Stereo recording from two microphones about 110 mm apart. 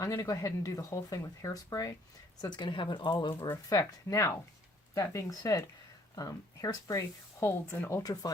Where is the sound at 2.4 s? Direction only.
40° left (ahead or behind).